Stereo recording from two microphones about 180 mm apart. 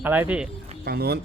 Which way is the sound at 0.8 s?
60° right (ahead or behind).